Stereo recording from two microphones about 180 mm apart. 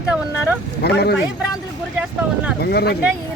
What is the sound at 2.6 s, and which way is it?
Speech, 65° left (ahead or behind).